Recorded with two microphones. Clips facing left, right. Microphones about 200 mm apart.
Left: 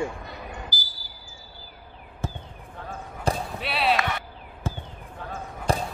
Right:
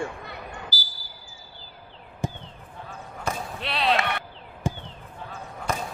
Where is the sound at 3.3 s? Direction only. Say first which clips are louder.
Left 4 dB; 30° left (ahead or behind).